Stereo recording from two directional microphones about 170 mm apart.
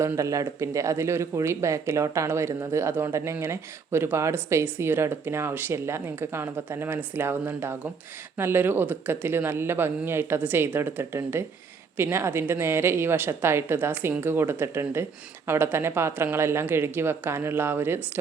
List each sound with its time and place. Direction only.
0.0 s speech: 15° right (ahead or behind)